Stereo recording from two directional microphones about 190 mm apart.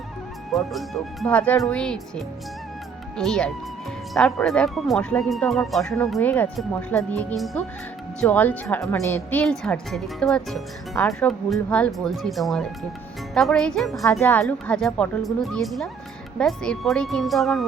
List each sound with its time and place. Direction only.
0.5 s a woman's voice: centre (ahead or behind)